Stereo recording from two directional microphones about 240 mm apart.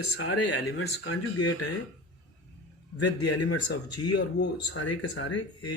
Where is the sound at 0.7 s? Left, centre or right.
Left.